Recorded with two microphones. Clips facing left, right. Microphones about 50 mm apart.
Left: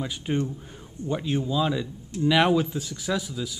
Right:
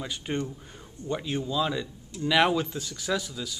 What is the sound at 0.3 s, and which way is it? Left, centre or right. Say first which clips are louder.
A man's voice: left 4 dB; centre.